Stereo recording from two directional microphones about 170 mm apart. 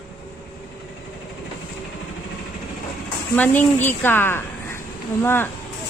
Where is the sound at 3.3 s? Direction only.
10° left (ahead or behind).